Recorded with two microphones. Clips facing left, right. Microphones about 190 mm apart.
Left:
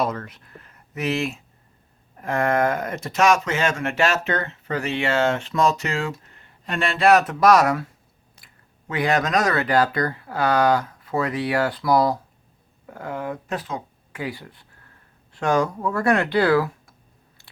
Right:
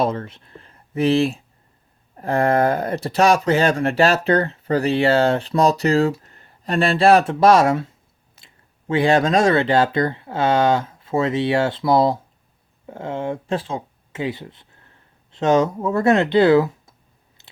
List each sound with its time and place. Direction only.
0.0 s speech: 30° right (ahead or behind)
17.4 s chewing: 20° right (ahead or behind)